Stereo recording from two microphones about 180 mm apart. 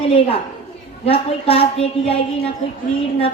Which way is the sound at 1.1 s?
30° left (ahead or behind).